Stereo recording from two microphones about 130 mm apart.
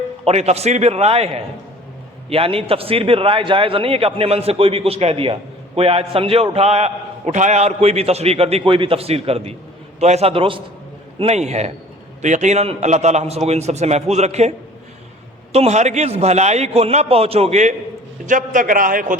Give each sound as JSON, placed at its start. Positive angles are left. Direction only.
{"t": 0.3, "sound": "a man's voice", "side_deg": -55}
{"t": 11.2, "sound": "a man's voice", "side_deg": -55}
{"t": 15.5, "sound": "a man's voice", "side_deg": -55}
{"t": 18.3, "sound": "a man's voice", "side_deg": -85}